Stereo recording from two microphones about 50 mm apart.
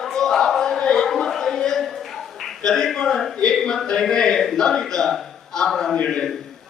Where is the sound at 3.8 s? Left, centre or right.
Centre.